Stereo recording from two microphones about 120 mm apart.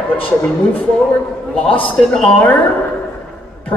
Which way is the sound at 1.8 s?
15° left (ahead or behind).